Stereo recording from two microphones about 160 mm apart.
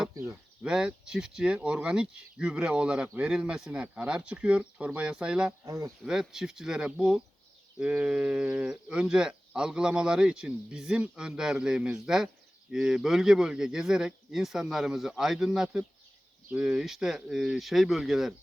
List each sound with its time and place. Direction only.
0.6 s speech: 5° right (ahead or behind)
5.6 s speech: 20° right (ahead or behind)
6.0 s speech: 5° right (ahead or behind)